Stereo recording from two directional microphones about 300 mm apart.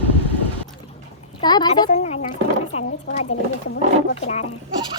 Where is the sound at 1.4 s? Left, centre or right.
Centre.